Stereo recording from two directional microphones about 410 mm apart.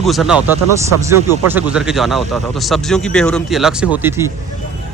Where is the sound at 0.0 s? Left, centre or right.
Centre.